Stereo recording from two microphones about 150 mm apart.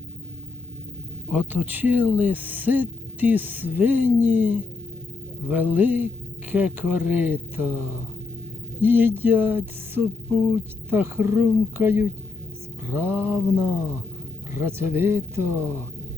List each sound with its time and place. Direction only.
1.3 s speech: 10° right (ahead or behind)